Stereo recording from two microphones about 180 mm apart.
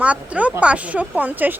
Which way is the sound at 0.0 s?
5° right (ahead or behind).